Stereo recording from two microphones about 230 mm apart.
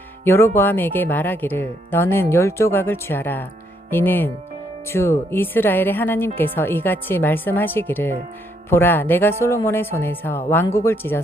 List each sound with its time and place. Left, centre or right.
0.3 s speech: centre